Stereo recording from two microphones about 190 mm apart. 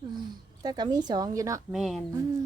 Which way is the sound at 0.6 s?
20° right (ahead or behind).